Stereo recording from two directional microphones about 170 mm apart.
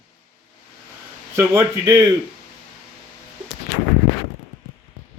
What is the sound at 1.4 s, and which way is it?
Speech, 20° right (ahead or behind).